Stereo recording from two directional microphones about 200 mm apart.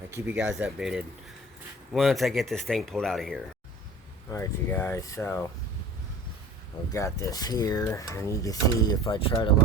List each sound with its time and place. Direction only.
0.1 s speech: 10° right (ahead or behind)
4.3 s speech: 10° left (ahead or behind)
6.9 s speech: 15° left (ahead or behind)